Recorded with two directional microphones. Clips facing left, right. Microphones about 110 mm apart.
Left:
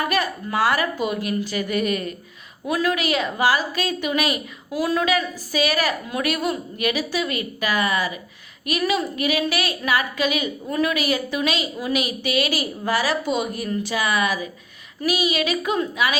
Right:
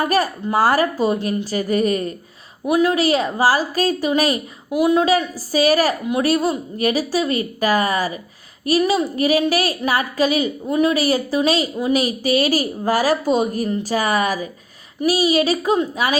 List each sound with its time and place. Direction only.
0.0 s a woman's voice: 40° right (ahead or behind)
2.6 s a woman's voice: 20° right (ahead or behind)
2.9 s a woman's voice: 35° right (ahead or behind)
4.7 s a woman's voice: 20° right (ahead or behind)
5.5 s a woman's voice: 40° right (ahead or behind)